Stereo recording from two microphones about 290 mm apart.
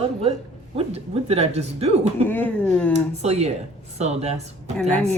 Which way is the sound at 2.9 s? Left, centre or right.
Right.